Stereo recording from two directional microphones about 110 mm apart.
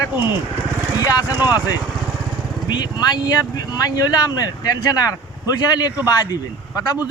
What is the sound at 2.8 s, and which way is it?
Speech, 35° left (ahead or behind).